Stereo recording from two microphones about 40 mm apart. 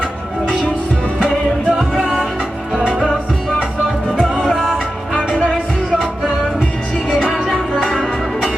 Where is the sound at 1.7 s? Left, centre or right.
Centre.